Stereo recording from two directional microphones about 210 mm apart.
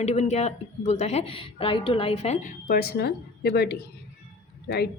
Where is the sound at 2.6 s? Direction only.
45° left (ahead or behind).